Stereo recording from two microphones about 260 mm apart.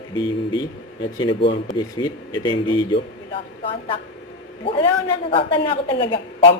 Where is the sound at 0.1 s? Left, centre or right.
Centre.